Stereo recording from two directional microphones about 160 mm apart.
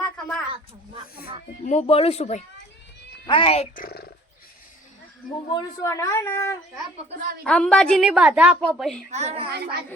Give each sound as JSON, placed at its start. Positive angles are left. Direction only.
{"t": 0.0, "sound": "a sound", "side_deg": 5}
{"t": 1.6, "sound": "speech", "side_deg": 40}
{"t": 3.8, "sound": "speech", "side_deg": 70}
{"t": 5.5, "sound": "a man's voice", "side_deg": 25}
{"t": 7.4, "sound": "a woman's voice", "side_deg": 5}
{"t": 9.0, "sound": "a woman's voice", "side_deg": -45}